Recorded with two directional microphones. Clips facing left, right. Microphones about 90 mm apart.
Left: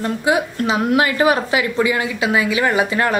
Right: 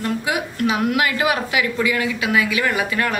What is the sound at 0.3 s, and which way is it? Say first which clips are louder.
A woman's voice: left 5 dB; 30° left (ahead or behind).